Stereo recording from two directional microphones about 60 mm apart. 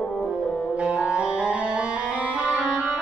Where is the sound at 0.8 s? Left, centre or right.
Centre.